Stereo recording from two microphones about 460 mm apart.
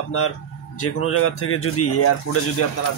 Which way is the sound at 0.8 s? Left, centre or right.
Left.